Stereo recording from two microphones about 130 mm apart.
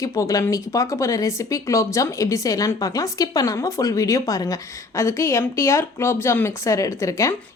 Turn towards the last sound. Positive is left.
turn(degrees=25)  # may be behind; listen again after turning